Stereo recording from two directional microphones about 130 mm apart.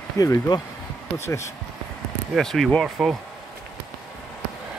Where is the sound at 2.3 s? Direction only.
Centre (ahead or behind).